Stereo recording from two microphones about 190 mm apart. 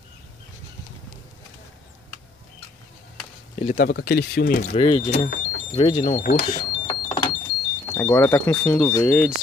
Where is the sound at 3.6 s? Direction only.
45° left (ahead or behind).